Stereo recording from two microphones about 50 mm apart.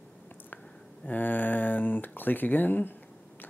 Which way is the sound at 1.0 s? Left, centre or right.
Left.